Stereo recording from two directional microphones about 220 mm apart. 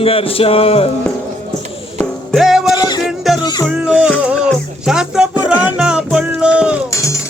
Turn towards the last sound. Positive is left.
turn(degrees=-5)  # may be behind; listen again after turning